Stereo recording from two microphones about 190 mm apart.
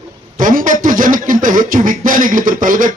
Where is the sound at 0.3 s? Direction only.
45° right (ahead or behind).